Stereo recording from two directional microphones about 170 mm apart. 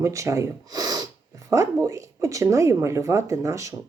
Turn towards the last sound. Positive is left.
turn(degrees=-20)  # may be behind; listen again after turning